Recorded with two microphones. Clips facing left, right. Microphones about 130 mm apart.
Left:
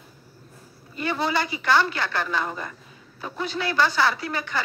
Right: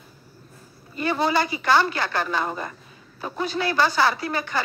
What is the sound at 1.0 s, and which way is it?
Speech, 40° right (ahead or behind).